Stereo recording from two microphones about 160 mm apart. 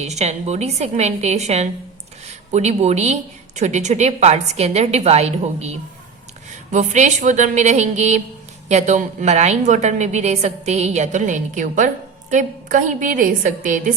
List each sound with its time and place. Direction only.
0.0 s a woman's voice: 45° right (ahead or behind)